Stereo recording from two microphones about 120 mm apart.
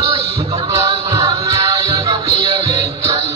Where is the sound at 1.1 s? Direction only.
35° right (ahead or behind).